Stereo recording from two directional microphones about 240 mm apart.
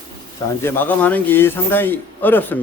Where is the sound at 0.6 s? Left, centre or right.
Centre.